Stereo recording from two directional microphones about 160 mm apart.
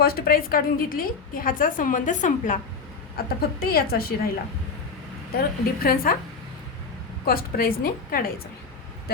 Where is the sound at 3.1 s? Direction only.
70° left (ahead or behind).